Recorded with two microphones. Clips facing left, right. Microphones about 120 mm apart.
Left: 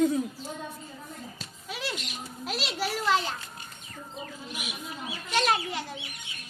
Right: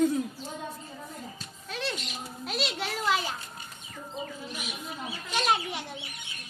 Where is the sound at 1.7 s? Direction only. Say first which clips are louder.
Right 1 dB; 10° left (ahead or behind).